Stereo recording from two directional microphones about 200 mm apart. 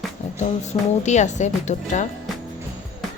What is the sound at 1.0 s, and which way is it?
A woman's voice, 35° left (ahead or behind).